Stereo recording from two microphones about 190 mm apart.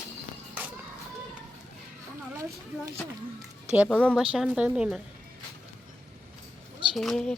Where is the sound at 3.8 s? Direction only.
5° left (ahead or behind).